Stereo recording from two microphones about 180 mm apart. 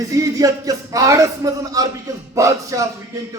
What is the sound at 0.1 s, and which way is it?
A man's voice, 20° right (ahead or behind).